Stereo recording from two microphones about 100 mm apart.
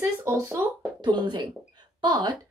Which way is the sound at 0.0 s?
30° right (ahead or behind).